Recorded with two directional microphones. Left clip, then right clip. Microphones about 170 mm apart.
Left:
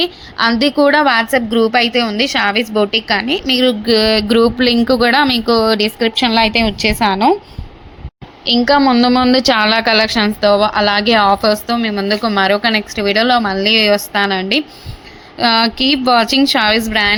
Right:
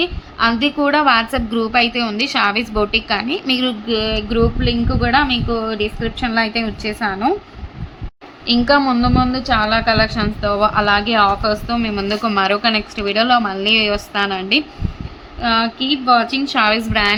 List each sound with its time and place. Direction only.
0.0 s a woman's voice: 35° left (ahead or behind)
3.8 s speech: 35° left (ahead or behind)
8.4 s a woman's voice: 25° left (ahead or behind)
15.4 s speech: 40° left (ahead or behind); by 17.2 s 20° left (ahead or behind)